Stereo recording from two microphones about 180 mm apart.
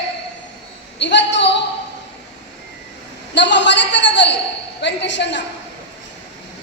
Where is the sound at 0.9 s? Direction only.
75° left (ahead or behind).